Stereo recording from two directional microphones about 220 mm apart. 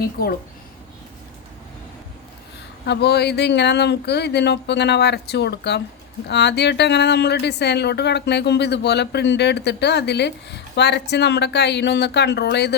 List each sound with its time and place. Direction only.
0.0 s a woman's voice: 45° left (ahead or behind)
2.8 s a woman's voice: 50° left (ahead or behind)